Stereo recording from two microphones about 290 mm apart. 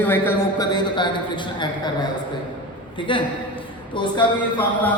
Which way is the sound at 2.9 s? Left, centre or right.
Centre.